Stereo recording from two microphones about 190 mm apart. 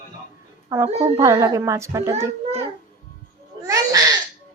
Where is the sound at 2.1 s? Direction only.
35° right (ahead or behind).